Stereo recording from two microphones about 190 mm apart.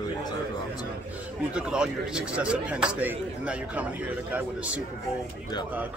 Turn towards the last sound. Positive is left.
turn(degrees=-5)  # may be behind; listen again after turning